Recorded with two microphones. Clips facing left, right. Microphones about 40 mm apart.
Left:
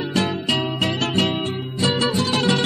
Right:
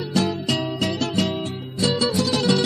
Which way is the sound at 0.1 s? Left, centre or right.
Left.